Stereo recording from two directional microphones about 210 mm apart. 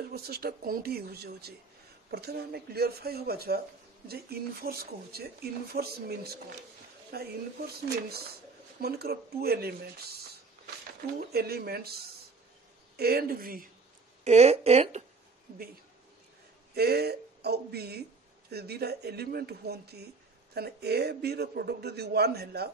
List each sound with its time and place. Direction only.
0.1 s speech: 50° right (ahead or behind)
11.1 s speech: 50° right (ahead or behind)
12.9 s speech: 50° right (ahead or behind)
14.2 s speech: 30° right (ahead or behind)
16.7 s speech: 50° right (ahead or behind)